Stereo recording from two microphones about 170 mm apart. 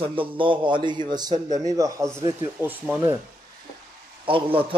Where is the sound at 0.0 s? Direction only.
30° right (ahead or behind); by 3.0 s 10° right (ahead or behind).